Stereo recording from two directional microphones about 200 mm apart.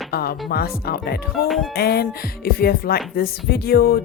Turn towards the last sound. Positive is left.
turn(degrees=50)  # may be behind; listen again after turning